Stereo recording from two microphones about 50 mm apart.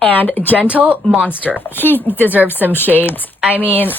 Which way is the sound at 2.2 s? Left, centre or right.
Right.